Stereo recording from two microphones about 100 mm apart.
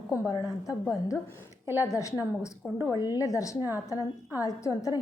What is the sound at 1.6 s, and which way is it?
Speech, 20° right (ahead or behind).